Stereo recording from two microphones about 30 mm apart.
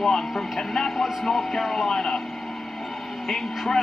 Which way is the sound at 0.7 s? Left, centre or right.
Centre.